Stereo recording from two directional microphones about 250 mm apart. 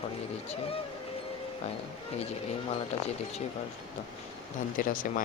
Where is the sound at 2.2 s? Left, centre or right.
Left.